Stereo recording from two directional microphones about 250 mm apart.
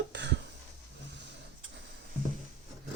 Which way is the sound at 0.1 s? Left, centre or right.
Right.